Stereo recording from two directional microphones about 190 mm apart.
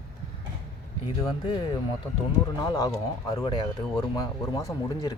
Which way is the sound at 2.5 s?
20° left (ahead or behind).